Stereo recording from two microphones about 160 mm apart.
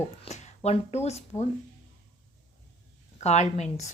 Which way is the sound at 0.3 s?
45° left (ahead or behind).